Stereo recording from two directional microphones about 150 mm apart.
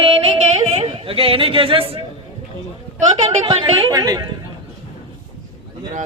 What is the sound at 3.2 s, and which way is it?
Speech, 25° right (ahead or behind).